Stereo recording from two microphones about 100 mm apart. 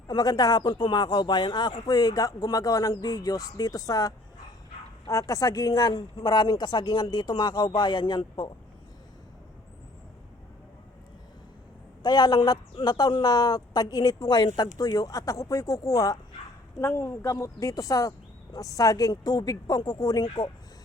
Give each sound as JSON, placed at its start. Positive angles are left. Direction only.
{"t": 0.1, "sound": "a woman's voice", "side_deg": 40}
{"t": 12.0, "sound": "a woman's voice", "side_deg": 45}